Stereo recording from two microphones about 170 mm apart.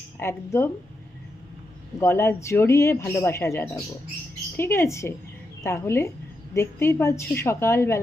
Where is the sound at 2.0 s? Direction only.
15° left (ahead or behind).